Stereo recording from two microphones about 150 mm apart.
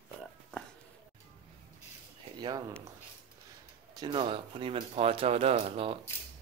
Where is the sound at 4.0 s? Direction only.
30° right (ahead or behind).